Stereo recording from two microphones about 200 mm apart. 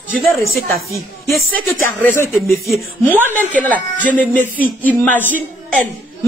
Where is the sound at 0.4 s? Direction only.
45° right (ahead or behind).